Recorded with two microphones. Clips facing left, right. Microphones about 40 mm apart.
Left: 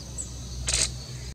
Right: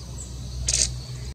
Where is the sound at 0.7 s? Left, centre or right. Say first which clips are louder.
Right 1 dB; left.